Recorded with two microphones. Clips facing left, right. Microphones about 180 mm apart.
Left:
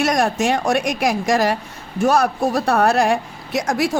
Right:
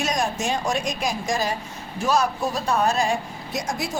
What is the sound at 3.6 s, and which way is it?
Speech, 80° left.